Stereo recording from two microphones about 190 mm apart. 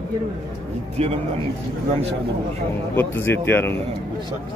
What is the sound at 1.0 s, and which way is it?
Speech, 35° right (ahead or behind).